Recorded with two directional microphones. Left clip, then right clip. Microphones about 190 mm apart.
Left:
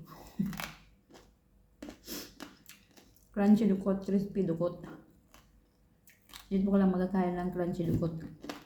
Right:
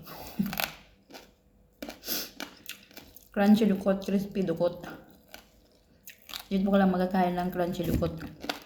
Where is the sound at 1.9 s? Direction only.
15° left (ahead or behind).